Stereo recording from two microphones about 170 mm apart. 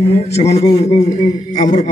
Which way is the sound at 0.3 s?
40° left (ahead or behind).